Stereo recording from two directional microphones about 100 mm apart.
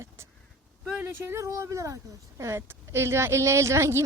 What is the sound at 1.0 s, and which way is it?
Speech, 20° right (ahead or behind).